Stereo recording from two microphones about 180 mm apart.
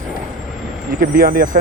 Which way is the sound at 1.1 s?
55° right (ahead or behind).